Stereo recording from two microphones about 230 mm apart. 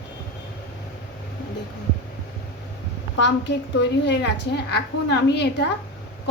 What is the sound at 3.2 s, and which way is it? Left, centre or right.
A woman's voice, left.